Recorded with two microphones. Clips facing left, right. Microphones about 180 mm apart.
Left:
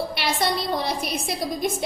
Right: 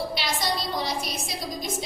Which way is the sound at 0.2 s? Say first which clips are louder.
Left 4 dB; 60° left (ahead or behind).